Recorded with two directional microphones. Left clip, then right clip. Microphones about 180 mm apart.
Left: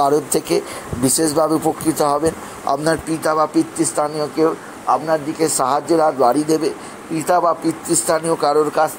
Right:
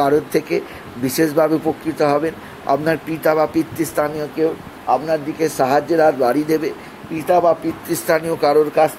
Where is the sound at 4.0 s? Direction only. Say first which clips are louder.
Right 1 dB; 10° right (ahead or behind).